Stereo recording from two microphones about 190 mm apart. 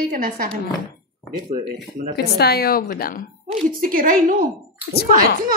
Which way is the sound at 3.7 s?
50° right (ahead or behind).